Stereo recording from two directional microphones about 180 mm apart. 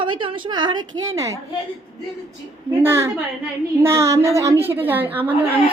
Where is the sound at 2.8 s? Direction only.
15° right (ahead or behind).